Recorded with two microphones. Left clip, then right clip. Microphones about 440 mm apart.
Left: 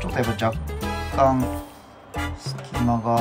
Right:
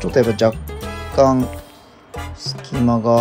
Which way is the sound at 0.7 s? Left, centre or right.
Right.